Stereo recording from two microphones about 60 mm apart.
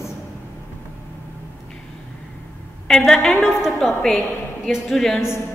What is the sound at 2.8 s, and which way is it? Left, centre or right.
A woman's voice, centre.